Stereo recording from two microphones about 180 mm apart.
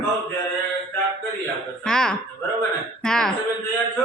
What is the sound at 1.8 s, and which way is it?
Speech, 5° left (ahead or behind).